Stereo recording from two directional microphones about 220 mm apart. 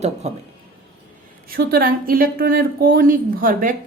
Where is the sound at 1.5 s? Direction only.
45° right (ahead or behind).